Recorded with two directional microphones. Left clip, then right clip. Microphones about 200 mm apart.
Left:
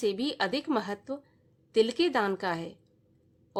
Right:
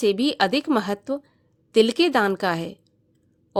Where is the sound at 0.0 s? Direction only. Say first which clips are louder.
Right 9 dB; 35° right (ahead or behind).